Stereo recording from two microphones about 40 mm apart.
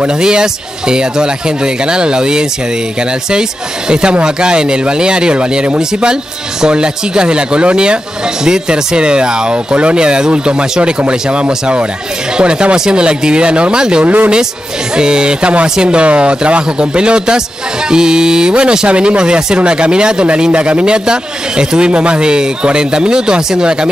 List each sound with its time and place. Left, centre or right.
0.2 s speech: centre
14.0 s speech: right
15.0 s speech: right